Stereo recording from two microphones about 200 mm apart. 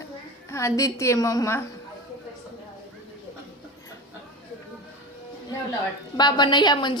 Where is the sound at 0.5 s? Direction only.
15° left (ahead or behind).